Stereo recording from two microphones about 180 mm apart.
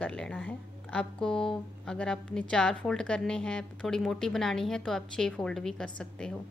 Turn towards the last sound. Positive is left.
turn(degrees=5)  # may be behind; listen again after turning